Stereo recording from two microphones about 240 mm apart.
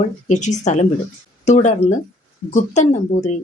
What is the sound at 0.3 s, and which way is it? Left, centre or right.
A woman's voice, left.